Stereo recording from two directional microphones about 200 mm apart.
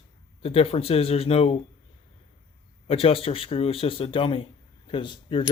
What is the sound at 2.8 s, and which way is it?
A man's voice, 30° left (ahead or behind).